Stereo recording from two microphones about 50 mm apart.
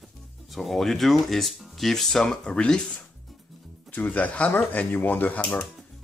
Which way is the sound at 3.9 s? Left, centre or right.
Left.